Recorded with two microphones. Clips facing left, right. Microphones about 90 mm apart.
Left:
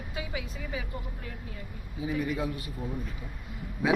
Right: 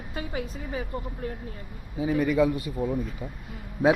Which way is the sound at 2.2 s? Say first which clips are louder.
Right 9 dB; 75° right (ahead or behind).